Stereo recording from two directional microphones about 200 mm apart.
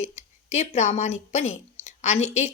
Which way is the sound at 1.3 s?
35° left (ahead or behind).